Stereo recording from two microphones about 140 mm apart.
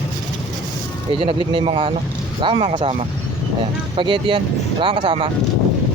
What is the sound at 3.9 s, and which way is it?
Speech, 35° right (ahead or behind).